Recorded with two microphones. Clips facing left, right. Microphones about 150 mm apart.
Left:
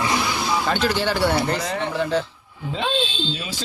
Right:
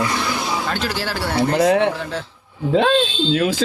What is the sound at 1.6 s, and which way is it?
Speech, 70° right (ahead or behind).